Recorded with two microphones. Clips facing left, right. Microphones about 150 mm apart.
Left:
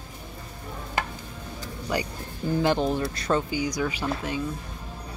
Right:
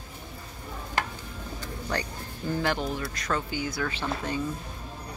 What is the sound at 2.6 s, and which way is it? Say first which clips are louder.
Speech: left 7 dB; 20° left (ahead or behind).